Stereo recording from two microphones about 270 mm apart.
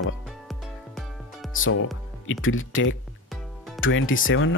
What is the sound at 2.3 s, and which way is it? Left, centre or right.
Speech, left.